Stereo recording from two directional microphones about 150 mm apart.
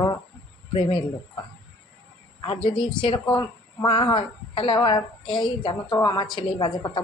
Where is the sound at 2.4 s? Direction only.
35° left (ahead or behind).